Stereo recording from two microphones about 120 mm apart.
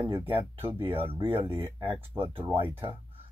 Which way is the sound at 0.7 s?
50° right (ahead or behind).